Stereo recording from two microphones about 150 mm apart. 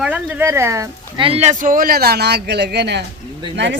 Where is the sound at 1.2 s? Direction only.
40° right (ahead or behind); by 2.9 s 90° right.